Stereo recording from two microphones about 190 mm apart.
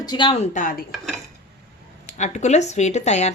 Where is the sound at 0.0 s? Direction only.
25° left (ahead or behind); by 0.9 s 45° left (ahead or behind).